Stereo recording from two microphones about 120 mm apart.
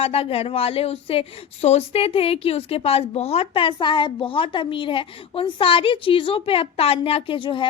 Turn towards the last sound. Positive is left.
turn(degrees=45)  # may be behind; listen again after turning